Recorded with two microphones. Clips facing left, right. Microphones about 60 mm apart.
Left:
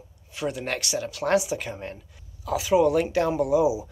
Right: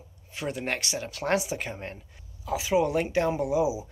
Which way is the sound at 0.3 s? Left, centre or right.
Right.